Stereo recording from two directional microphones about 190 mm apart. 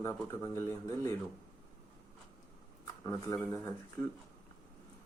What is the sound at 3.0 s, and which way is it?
Speech, 15° left (ahead or behind).